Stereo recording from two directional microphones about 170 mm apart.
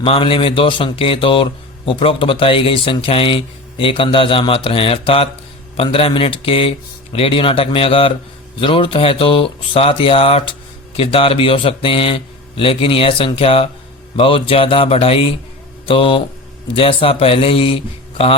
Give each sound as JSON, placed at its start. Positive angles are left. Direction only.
{"t": 0.0, "sound": "a man's voice", "side_deg": 30}